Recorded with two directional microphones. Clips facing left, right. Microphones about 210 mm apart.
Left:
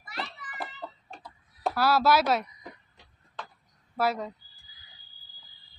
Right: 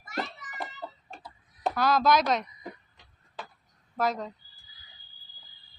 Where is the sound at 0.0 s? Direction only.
45° right (ahead or behind).